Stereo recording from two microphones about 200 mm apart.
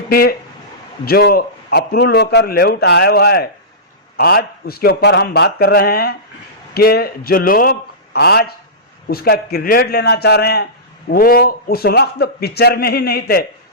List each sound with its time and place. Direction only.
0.1 s a man's voice: 50° left (ahead or behind)